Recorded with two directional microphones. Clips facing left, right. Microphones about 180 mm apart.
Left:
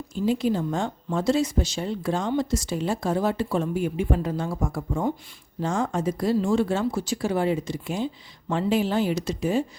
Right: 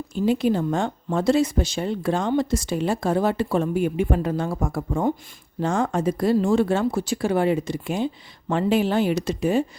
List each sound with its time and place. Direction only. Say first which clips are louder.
0.1 s speech: right 3 dB; 65° right (ahead or behind)